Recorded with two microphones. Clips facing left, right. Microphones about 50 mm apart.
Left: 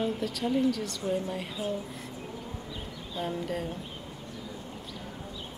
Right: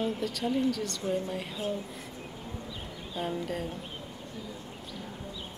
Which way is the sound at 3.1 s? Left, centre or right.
Centre.